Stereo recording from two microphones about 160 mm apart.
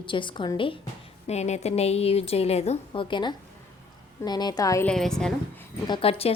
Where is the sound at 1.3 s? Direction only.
45° left (ahead or behind); by 4.9 s 20° left (ahead or behind).